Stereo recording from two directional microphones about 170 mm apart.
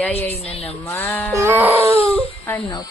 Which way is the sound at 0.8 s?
15° left (ahead or behind).